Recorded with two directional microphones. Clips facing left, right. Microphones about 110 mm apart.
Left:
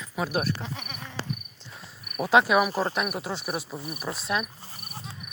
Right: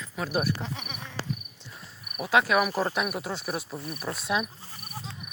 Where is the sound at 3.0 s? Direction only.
Centre (ahead or behind).